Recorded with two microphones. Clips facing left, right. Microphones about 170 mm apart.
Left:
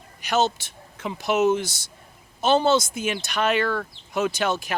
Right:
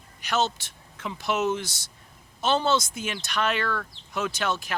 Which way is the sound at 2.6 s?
45° left (ahead or behind).